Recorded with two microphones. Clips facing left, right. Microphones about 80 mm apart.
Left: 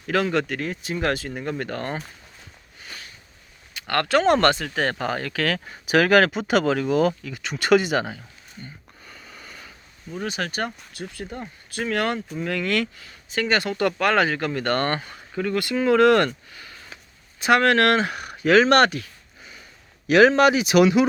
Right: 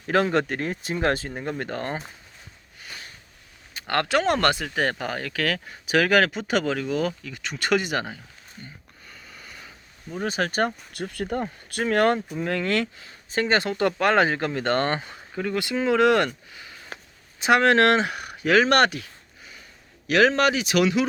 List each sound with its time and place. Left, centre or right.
0.1 s speech: right
1.3 s speech: centre
3.8 s a sound: right
4.0 s speech: centre
8.6 s a sound: centre
10.2 s speech: right
10.9 s speech: right
11.9 s speech: right
18.0 s speech: centre
20.1 s speech: centre